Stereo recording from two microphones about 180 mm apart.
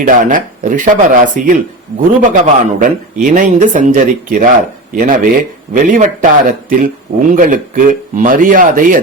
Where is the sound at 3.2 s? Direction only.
45° right (ahead or behind).